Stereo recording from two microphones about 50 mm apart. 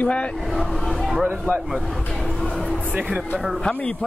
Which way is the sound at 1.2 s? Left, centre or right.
Right.